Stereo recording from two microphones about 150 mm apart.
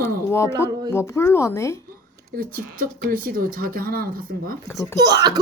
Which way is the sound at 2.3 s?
70° right (ahead or behind).